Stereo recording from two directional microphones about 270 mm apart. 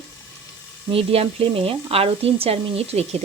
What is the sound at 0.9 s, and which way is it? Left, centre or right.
Speech, right.